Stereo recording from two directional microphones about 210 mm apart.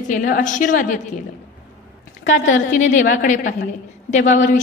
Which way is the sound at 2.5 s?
35° left (ahead or behind).